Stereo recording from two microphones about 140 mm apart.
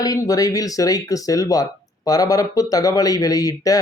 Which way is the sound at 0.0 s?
25° left (ahead or behind).